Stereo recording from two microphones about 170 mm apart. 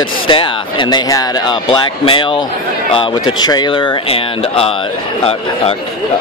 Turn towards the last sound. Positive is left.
turn(degrees=35)  # may be behind; listen again after turning